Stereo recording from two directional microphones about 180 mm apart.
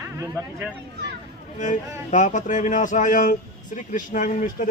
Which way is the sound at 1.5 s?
45° left (ahead or behind).